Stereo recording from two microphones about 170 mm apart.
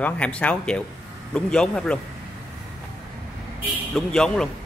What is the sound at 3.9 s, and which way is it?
Speech, 5° left (ahead or behind).